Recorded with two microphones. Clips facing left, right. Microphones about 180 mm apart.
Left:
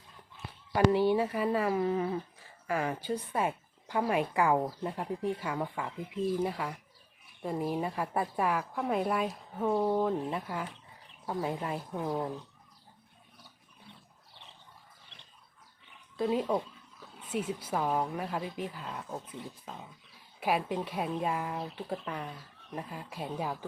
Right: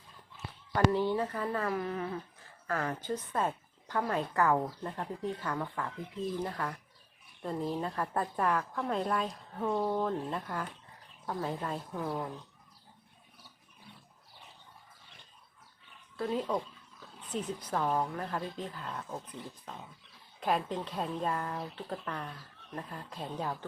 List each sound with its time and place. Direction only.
0.9 s a woman's voice: 15° left (ahead or behind)
16.1 s a woman's voice: 15° left (ahead or behind)